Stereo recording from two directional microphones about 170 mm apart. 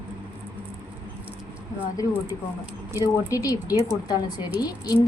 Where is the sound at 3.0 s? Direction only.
20° left (ahead or behind).